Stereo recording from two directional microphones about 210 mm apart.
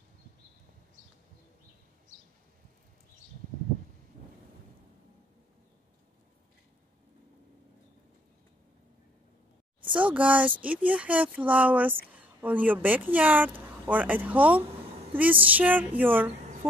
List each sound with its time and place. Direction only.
9.9 s a woman's voice: 5° right (ahead or behind)